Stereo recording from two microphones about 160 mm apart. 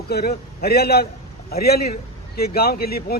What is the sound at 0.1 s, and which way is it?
Speech, 80° left.